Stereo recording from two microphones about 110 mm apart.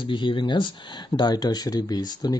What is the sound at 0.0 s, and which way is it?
Speech, 50° left (ahead or behind).